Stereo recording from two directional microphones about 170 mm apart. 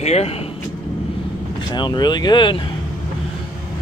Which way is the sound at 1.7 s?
25° left (ahead or behind).